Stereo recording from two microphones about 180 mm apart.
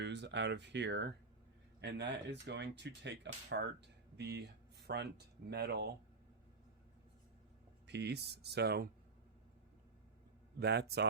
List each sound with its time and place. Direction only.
0.0 s speech: 75° right (ahead or behind)
7.9 s speech: 70° right (ahead or behind)
10.6 s speech: 65° right (ahead or behind)